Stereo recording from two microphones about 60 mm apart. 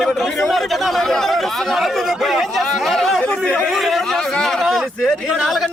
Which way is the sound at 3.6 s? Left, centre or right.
Centre.